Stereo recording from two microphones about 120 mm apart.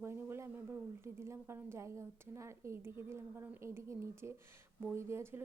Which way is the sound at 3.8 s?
20° right (ahead or behind).